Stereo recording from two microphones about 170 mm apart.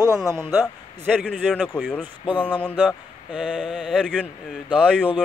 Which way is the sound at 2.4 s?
10° left (ahead or behind).